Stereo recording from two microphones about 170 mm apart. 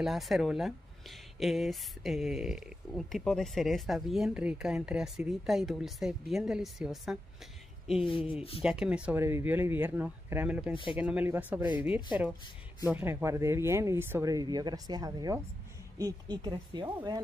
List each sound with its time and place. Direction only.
0.0 s speech: centre (ahead or behind)
8.0 s speech: 30° left (ahead or behind)
8.6 s speech: 5° right (ahead or behind)
10.7 s speech: 30° left (ahead or behind)
11.0 s speech: 10° right (ahead or behind)